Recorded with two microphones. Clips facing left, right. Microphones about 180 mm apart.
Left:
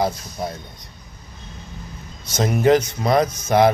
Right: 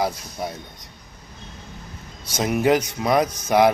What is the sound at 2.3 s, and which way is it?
Speech, 10° right (ahead or behind).